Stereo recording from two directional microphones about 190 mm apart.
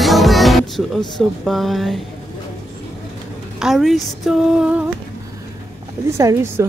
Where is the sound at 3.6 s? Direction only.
Centre (ahead or behind).